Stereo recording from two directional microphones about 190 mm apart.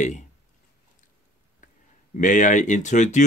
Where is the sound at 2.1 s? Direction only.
40° left (ahead or behind).